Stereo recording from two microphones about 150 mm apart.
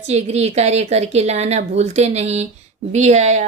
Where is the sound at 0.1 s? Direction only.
45° right (ahead or behind).